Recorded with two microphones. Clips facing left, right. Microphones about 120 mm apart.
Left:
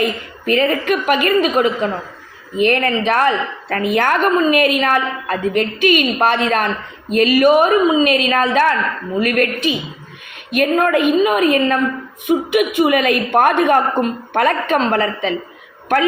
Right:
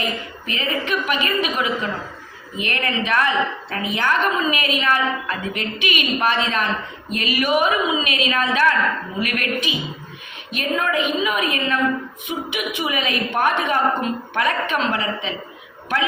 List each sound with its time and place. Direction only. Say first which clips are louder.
0.0 s a woman's voice: left 7 dB; 50° left (ahead or behind)